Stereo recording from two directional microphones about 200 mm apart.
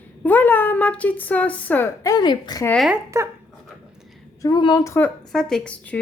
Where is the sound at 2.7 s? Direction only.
Centre (ahead or behind).